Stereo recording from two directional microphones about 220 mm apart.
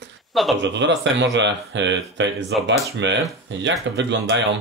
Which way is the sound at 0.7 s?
55° right (ahead or behind).